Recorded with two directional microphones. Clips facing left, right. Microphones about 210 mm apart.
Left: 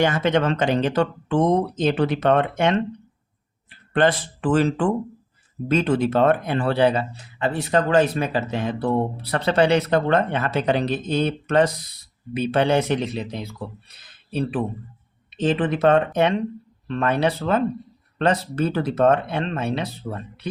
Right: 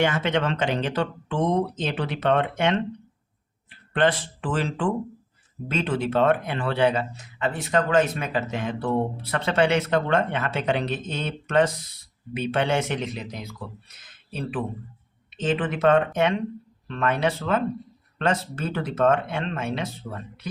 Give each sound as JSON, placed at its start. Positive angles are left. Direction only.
{"t": 0.0, "sound": "speech", "side_deg": 40}
{"t": 3.9, "sound": "speech", "side_deg": 45}